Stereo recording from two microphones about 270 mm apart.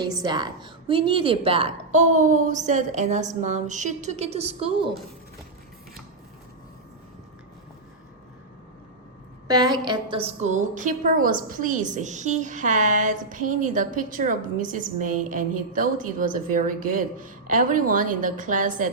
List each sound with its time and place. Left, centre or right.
0.0 s a woman's voice: centre
9.5 s a woman's voice: centre